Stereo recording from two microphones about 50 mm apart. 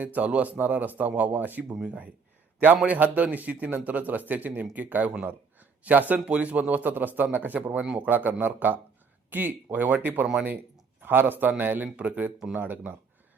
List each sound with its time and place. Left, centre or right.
0.0 s a man's voice: right